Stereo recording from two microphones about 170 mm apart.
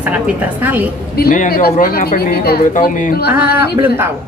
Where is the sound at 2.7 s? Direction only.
50° left (ahead or behind).